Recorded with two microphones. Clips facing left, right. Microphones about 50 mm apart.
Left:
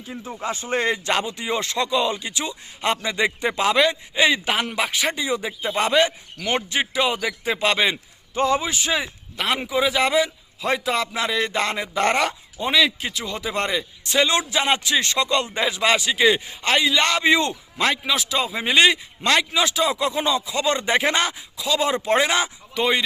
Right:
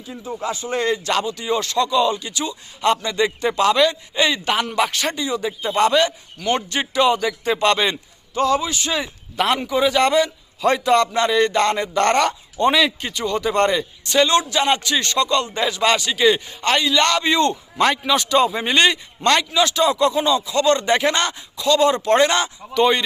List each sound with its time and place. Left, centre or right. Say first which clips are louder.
0.4 s a man's voice: right 1 dB; left
0.9 s a man's voice: right 2 dB; left; by 7.9 s centre
8.4 s speech: right 2 dB; left
9.4 s a man's voice: right 4 dB; centre
17.7 s a man's voice: right 3 dB; centre